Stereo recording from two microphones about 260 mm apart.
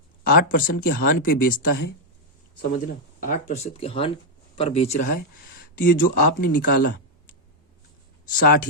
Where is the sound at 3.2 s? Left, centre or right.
Left.